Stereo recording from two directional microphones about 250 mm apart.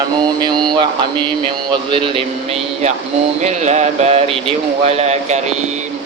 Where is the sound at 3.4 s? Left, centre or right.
Right.